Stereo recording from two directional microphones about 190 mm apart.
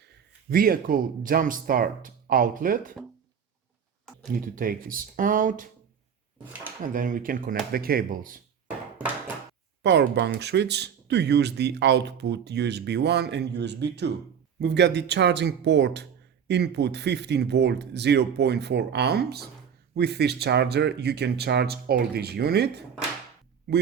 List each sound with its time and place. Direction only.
0.5 s speech: 50° right (ahead or behind)
4.3 s speech: 45° right (ahead or behind)
6.9 s speech: 45° right (ahead or behind)
9.8 s speech: 65° right (ahead or behind)